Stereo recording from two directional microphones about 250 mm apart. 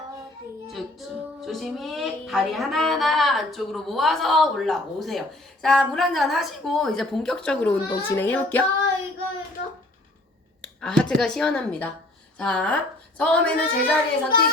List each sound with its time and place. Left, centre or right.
0.7 s music: centre
10.6 s speech: centre
12.4 s music: centre
14.3 s a woman's voice: left